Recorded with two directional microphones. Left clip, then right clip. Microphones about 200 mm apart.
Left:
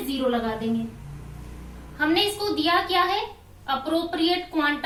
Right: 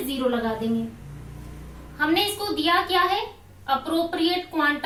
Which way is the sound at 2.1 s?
20° right (ahead or behind).